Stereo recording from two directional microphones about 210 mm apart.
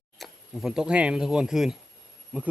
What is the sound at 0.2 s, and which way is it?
Speech, centre (ahead or behind).